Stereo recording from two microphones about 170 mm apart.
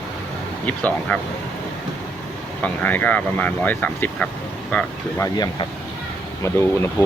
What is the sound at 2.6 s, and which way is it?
Speech, 10° left (ahead or behind).